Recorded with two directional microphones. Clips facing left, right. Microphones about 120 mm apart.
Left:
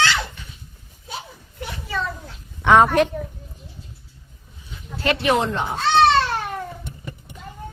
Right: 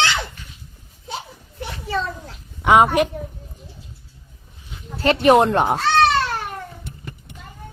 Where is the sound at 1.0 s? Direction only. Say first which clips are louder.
Right 3 dB; 25° right (ahead or behind).